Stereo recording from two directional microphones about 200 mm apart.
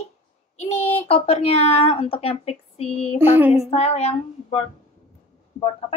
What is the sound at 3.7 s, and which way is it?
Speech, 30° left (ahead or behind).